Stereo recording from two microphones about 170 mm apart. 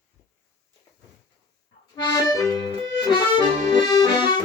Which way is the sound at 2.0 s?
20° left (ahead or behind).